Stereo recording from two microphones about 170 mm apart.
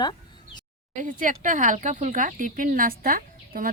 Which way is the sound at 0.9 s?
50° right (ahead or behind).